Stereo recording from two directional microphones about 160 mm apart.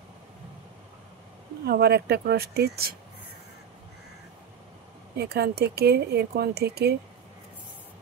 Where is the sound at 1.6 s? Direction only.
85° right.